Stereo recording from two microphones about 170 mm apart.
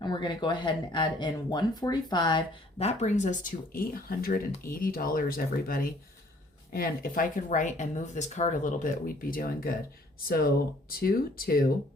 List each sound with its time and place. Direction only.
0.0 s speech: 25° left (ahead or behind); by 11.7 s 60° left (ahead or behind)